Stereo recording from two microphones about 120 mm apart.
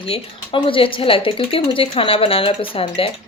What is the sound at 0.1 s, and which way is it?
Speech, 50° left (ahead or behind).